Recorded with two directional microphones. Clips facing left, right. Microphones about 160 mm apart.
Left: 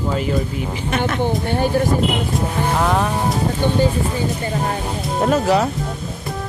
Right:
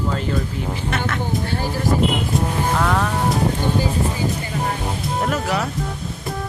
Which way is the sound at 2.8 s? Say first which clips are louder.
Left 3 dB; 20° left (ahead or behind).